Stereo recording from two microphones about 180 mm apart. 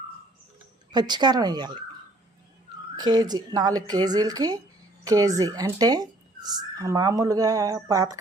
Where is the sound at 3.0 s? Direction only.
25° right (ahead or behind).